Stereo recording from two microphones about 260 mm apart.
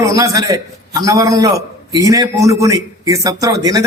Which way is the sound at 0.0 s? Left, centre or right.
Centre.